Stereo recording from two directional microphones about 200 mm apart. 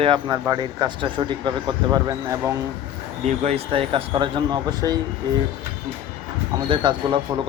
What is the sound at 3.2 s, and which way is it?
Speech, 30° right (ahead or behind).